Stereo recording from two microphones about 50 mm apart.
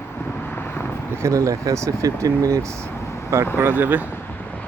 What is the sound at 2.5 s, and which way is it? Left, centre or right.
Speech, right.